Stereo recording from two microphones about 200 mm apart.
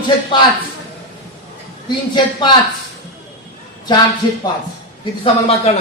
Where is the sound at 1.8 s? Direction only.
20° left (ahead or behind).